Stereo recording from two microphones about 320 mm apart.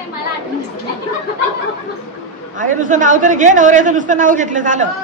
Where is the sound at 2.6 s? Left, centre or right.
Right.